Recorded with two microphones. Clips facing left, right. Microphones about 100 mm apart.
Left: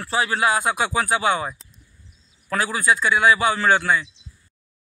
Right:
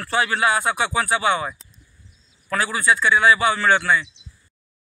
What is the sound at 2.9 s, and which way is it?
Speech, 20° left (ahead or behind).